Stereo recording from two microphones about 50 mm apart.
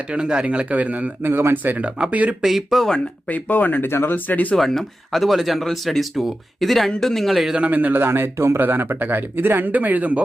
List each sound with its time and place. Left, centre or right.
0.1 s speech: centre
1.2 s speech: right
1.6 s speech: right
2.4 s speech: centre
3.2 s speech: left
4.3 s speech: left
4.5 s speech: centre
7.5 s speech: right
7.9 s speech: right
8.5 s speech: right